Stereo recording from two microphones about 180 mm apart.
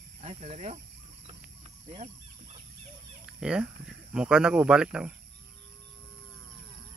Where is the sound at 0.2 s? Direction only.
35° right (ahead or behind).